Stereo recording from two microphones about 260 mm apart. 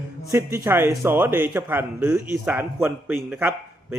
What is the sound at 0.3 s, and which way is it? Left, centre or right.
A man's voice, centre.